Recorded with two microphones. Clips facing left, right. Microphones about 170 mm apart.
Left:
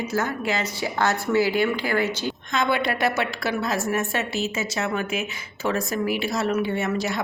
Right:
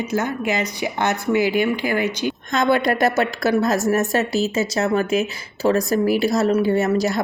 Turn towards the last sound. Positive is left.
turn(degrees=-40)  # may be behind; listen again after turning